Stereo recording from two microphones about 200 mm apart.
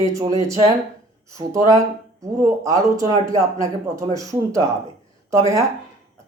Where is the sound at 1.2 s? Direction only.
15° right (ahead or behind).